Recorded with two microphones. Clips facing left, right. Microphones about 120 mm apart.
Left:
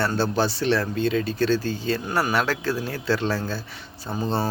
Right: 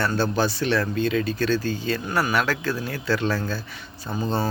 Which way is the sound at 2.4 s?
30° left (ahead or behind).